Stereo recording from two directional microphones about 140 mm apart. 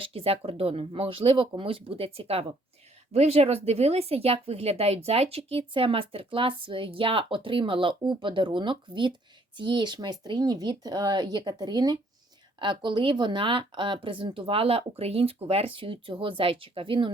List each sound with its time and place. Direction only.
0.0 s speech: 45° right (ahead or behind)